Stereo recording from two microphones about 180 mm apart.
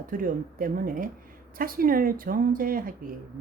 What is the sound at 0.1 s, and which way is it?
Speech, 50° right (ahead or behind).